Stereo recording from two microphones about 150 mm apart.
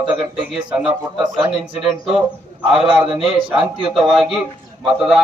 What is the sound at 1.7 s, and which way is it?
A man's voice, centre (ahead or behind).